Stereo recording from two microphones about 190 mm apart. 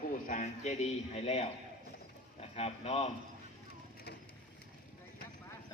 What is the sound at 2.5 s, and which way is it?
Speech, 35° left (ahead or behind).